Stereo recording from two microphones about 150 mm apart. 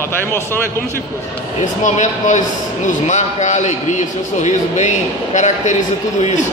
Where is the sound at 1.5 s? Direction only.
50° left (ahead or behind).